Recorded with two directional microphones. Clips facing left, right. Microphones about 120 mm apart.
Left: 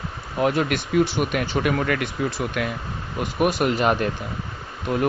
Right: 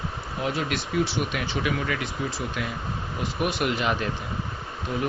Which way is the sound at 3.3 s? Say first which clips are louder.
Left 6 dB; 45° left (ahead or behind).